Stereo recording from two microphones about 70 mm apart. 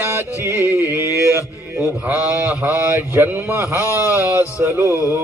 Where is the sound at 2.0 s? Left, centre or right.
Right.